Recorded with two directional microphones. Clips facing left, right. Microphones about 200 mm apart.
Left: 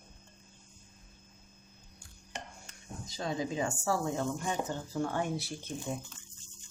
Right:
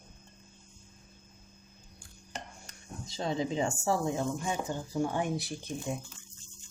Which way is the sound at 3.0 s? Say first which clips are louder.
Right 3 dB; 25° right (ahead or behind).